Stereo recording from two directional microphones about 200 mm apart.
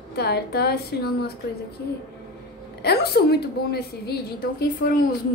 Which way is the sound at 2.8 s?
55° left (ahead or behind).